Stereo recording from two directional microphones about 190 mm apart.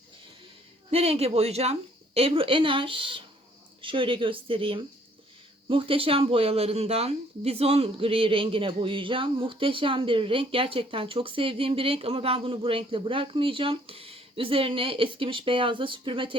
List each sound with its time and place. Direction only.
0.9 s speech: 30° right (ahead or behind)